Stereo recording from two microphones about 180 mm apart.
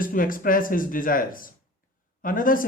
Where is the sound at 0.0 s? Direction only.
50° left (ahead or behind).